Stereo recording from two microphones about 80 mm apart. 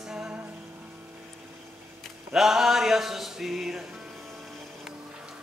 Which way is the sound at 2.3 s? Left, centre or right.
Centre.